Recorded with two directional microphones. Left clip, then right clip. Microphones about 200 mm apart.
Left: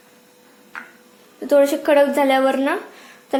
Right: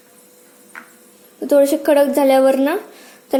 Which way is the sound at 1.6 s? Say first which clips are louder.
Right 1 dB; 25° right (ahead or behind).